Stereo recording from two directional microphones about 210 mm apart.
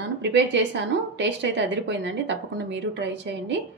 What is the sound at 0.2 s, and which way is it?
A woman's voice, 55° right (ahead or behind).